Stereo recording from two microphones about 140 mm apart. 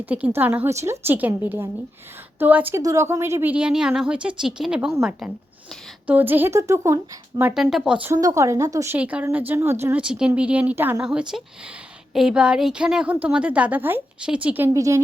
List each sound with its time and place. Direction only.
0.0 s speech: 10° right (ahead or behind)
6.1 s speech: 15° right (ahead or behind)
7.4 s speech: 5° right (ahead or behind)
8.1 s speech: 25° right (ahead or behind)
9.0 s speech: 10° right (ahead or behind)
10.0 s speech: 5° right (ahead or behind)
14.7 s speech: 25° right (ahead or behind)